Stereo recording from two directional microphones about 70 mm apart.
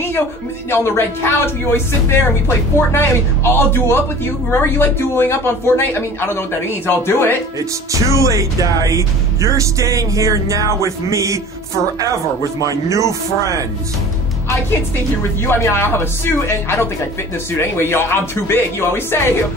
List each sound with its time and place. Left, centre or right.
0.7 s speech: left
7.9 s speech: right
12.6 s speech: right
15.7 s speech: left